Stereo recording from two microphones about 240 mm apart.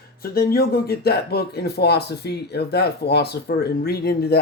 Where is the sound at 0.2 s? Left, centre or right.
Left.